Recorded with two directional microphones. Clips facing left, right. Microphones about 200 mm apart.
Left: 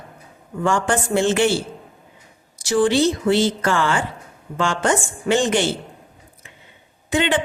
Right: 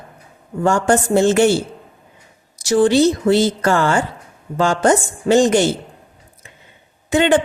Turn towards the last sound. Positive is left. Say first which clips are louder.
# right 6 dB
turn(degrees=-45)  # may be behind; listen again after turning